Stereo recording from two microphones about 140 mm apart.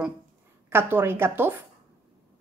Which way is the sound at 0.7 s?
15° right (ahead or behind).